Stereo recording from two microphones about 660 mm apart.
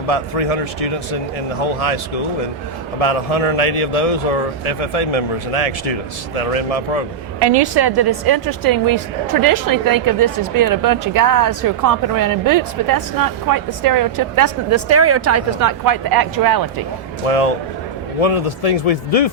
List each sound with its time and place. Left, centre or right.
0.1 s a man's voice: left
7.3 s a woman's voice: right
17.2 s a man's voice: left